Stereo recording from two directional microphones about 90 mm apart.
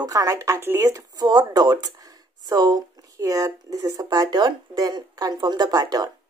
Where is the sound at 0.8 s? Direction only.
40° right (ahead or behind).